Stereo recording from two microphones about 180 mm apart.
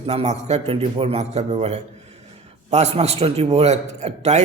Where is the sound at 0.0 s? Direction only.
35° right (ahead or behind).